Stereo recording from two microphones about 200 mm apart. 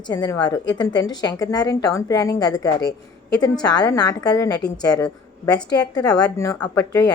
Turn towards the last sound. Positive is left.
turn(degrees=15)  # may be behind; listen again after turning